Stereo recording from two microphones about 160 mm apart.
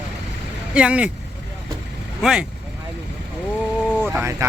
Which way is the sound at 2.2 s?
5° right (ahead or behind).